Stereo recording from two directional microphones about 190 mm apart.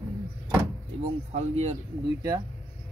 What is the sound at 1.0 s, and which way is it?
Speech, 35° right (ahead or behind).